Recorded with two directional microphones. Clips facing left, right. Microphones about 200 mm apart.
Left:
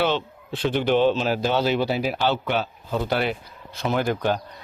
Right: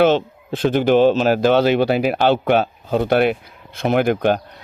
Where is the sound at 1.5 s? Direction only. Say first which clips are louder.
Right 7 dB; 65° right (ahead or behind).